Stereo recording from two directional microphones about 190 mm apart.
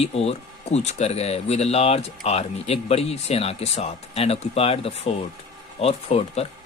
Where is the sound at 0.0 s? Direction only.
30° left (ahead or behind).